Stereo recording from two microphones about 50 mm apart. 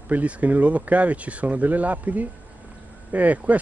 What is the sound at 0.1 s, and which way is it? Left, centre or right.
Speech, right.